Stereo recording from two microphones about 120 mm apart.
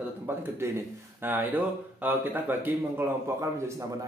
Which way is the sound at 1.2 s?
15° right (ahead or behind).